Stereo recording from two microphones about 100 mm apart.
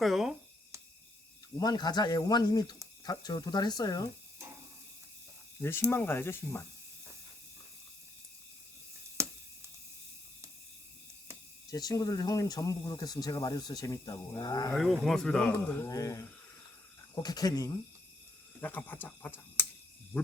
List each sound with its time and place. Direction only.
0.0 s a sound: centre (ahead or behind)
1.5 s speech: 45° left (ahead or behind)
5.5 s speech: 25° left (ahead or behind)
11.7 s speech: 40° left (ahead or behind)
14.7 s speech: centre (ahead or behind)
15.7 s speech: 35° left (ahead or behind)
18.6 s speech: 15° left (ahead or behind)